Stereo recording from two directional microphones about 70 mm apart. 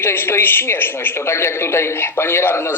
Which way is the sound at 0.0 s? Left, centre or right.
Left.